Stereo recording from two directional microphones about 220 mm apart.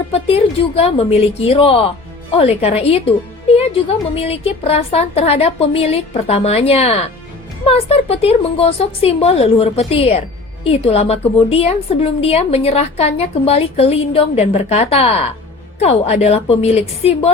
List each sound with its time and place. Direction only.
0.1 s a woman's voice: 25° left (ahead or behind)